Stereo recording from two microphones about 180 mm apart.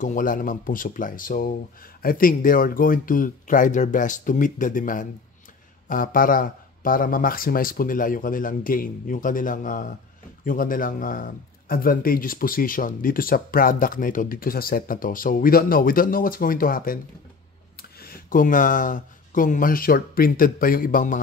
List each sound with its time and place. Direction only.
0.0 s speech: 45° left (ahead or behind)